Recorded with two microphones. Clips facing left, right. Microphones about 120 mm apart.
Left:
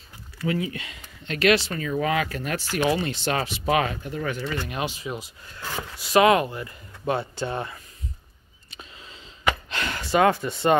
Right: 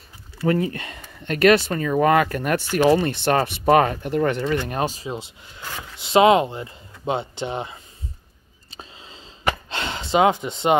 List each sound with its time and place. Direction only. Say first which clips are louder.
0.5 s speech: right 6 dB; 45° right (ahead or behind)
4.0 s speech: right 8 dB; 65° right (ahead or behind)
4.6 s speech: right 4 dB; 40° right (ahead or behind)
5.9 s speech: right 3 dB; 25° right (ahead or behind)
8.6 s gasp: right 3 dB; 30° right (ahead or behind)